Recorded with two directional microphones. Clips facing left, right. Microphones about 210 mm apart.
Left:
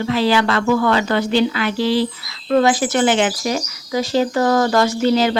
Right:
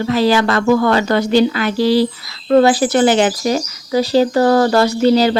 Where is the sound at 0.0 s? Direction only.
40° right (ahead or behind).